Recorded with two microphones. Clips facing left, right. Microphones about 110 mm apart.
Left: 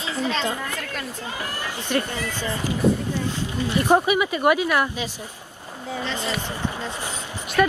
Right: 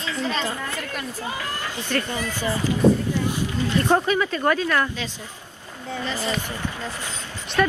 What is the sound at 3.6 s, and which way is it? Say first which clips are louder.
Speech: left 2 dB; 15° left (ahead or behind).